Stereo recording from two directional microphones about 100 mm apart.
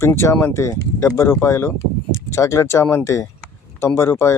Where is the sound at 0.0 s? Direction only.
25° left (ahead or behind).